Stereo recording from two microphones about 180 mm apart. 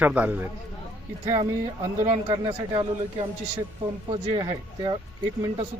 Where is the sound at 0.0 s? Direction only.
10° right (ahead or behind).